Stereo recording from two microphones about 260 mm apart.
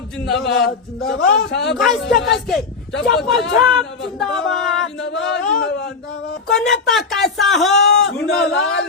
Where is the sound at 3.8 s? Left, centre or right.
Left.